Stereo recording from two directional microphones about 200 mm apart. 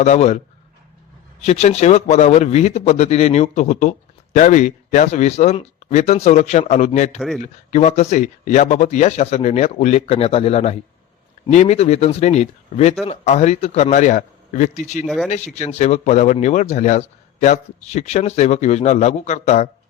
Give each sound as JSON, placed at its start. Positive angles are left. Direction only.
{"t": 0.0, "sound": "a man's voice", "side_deg": 35}
{"t": 7.2, "sound": "speech", "side_deg": 0}
{"t": 7.7, "sound": "a man's voice", "side_deg": 35}
{"t": 15.0, "sound": "speech", "side_deg": 0}
{"t": 15.5, "sound": "a man's voice", "side_deg": 35}